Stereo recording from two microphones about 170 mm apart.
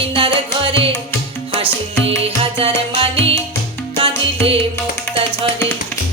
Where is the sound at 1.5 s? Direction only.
35° right (ahead or behind).